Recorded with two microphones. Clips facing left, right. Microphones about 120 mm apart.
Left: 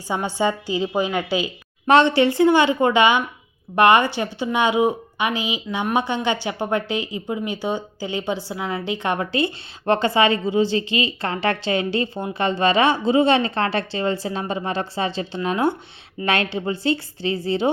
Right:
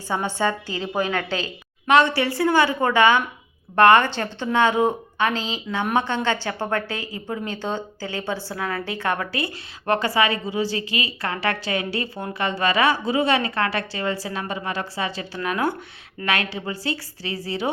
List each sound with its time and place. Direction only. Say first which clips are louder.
0.1 s a woman's voice: left 2 dB; 15° left (ahead or behind)